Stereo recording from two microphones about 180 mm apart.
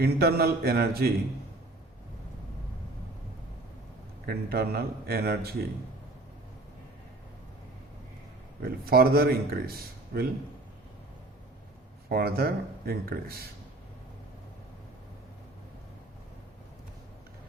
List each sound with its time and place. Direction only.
0.0 s a man's voice: 60° right (ahead or behind)
4.3 s a man's voice: 60° right (ahead or behind)
8.6 s a man's voice: 60° right (ahead or behind)
12.0 s a man's voice: 60° right (ahead or behind)